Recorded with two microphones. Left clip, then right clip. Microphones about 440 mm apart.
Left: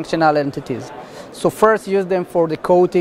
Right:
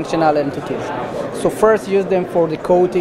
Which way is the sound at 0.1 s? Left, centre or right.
Left.